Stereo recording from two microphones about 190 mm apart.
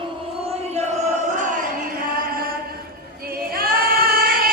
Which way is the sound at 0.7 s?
40° right (ahead or behind).